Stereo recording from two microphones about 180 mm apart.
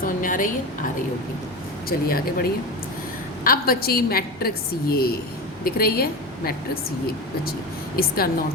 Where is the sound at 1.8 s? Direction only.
55° left (ahead or behind).